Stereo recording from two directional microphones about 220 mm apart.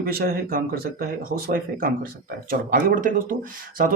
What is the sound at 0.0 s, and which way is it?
Speech, 40° right (ahead or behind).